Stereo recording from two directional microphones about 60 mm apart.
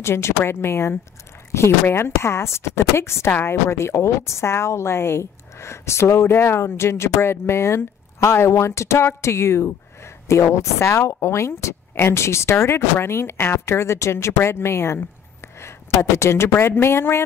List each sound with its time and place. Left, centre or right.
0.0 s speech: left